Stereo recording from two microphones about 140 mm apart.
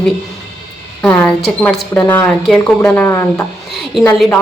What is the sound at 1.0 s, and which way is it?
A woman's voice, 10° left (ahead or behind).